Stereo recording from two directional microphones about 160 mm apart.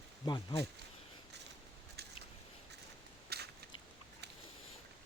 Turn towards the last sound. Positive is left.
turn(degrees=-85)